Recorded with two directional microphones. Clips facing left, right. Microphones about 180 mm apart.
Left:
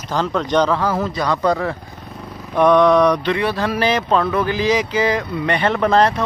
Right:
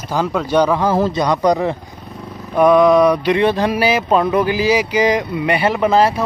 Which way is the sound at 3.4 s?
20° right (ahead or behind).